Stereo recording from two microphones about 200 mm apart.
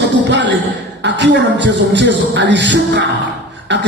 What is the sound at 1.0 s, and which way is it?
Music, 60° right (ahead or behind).